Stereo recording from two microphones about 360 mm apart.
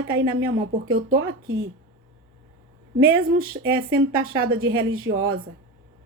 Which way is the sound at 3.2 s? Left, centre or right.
Right.